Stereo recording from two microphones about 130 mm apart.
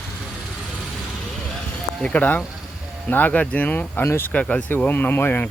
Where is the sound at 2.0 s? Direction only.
10° left (ahead or behind).